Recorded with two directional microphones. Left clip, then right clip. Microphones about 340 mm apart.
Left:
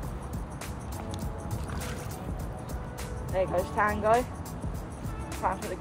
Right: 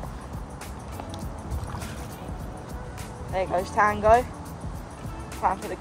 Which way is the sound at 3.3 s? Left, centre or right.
Right.